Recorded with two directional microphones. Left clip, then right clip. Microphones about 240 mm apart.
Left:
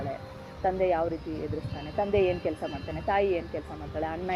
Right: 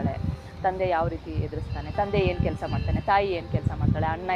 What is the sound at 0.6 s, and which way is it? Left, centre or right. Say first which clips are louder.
Speech: right 2 dB; centre.